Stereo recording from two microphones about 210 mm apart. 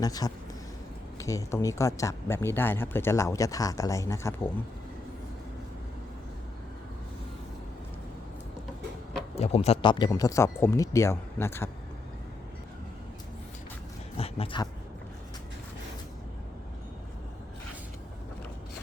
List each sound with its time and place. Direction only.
0.0 s speech: 15° left (ahead or behind)
9.3 s speech: 30° left (ahead or behind); by 11.7 s 10° left (ahead or behind)
14.2 s speech: 25° left (ahead or behind)